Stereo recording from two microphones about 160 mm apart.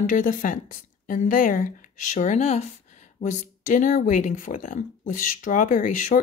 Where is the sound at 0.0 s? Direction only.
55° left (ahead or behind).